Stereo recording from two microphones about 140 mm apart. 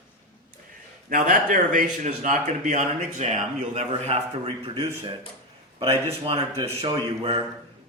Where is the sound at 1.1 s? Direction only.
75° right (ahead or behind).